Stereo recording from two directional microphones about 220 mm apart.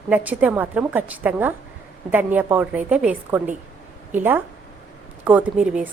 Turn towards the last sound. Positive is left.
turn(degrees=-5)  # may be behind; listen again after turning